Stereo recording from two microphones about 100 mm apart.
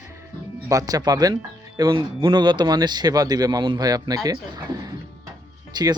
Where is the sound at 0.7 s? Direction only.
40° right (ahead or behind).